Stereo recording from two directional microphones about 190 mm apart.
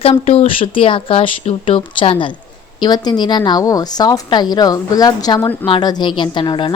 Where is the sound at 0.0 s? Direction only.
30° left (ahead or behind).